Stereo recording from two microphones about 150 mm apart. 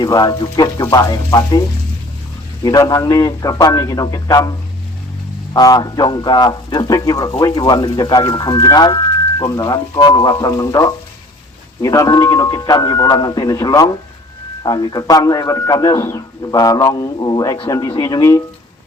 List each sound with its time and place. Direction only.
0.0 s a man's voice: 25° left (ahead or behind)
2.6 s a man's voice: 25° left (ahead or behind)
5.5 s a man's voice: 25° left (ahead or behind)